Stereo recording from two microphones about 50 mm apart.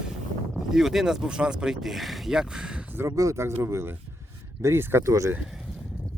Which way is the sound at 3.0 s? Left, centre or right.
Right.